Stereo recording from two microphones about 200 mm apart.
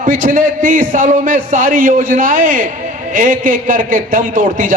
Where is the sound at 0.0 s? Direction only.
40° right (ahead or behind).